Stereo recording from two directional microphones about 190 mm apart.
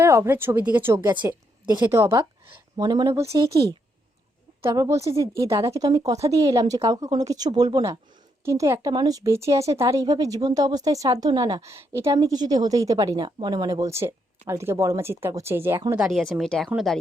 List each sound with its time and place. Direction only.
0.0 s a woman's voice: 15° right (ahead or behind)